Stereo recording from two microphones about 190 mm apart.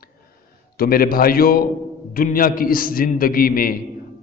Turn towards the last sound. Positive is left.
turn(degrees=50)  # may be behind; listen again after turning